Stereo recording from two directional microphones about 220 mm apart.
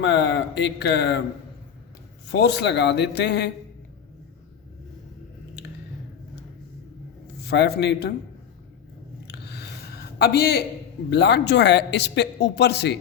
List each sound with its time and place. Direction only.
0.0 s a man's voice: 55° left (ahead or behind)
2.2 s a man's voice: 50° left (ahead or behind)
7.4 s a man's voice: 50° left (ahead or behind)
9.3 s a sound: 50° left (ahead or behind)
10.2 s a man's voice: 45° left (ahead or behind)